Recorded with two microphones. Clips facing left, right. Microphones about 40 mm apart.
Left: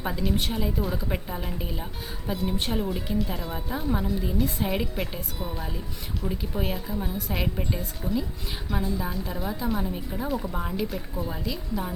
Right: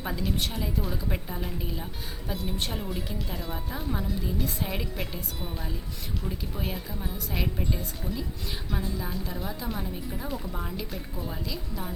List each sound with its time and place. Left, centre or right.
0.0 s a woman's voice: centre
6.2 s a woman's voice: centre